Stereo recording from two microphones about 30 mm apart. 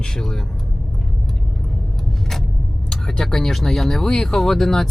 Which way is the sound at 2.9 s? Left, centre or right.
Left.